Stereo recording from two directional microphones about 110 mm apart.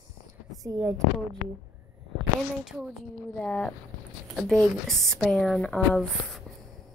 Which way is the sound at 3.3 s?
10° left (ahead or behind).